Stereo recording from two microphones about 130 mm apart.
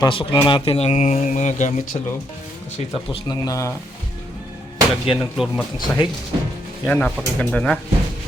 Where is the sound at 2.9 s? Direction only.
45° left (ahead or behind).